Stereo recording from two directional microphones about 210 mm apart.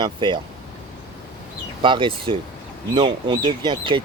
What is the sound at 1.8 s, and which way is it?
Speech, 25° right (ahead or behind).